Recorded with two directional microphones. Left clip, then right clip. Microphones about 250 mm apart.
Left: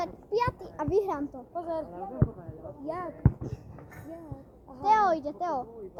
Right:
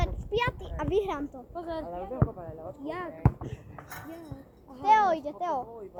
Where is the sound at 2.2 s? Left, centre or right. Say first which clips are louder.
Even; right.